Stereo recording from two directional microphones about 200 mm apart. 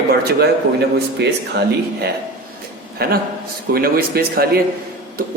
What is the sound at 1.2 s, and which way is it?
Speech, 60° right (ahead or behind).